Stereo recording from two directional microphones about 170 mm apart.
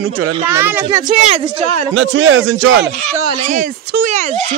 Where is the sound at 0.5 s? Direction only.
15° right (ahead or behind).